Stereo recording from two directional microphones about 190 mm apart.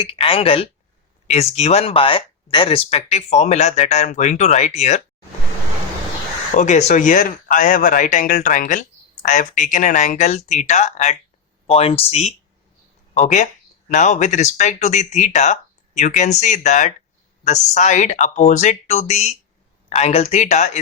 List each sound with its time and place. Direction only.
0.0 s speech: 30° left (ahead or behind)
6.5 s speech: 40° left (ahead or behind)